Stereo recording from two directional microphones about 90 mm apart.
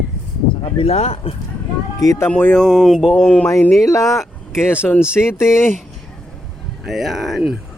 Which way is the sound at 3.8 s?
35° left (ahead or behind).